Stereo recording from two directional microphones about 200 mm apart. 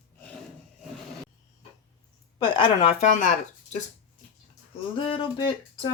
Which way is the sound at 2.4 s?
25° left (ahead or behind).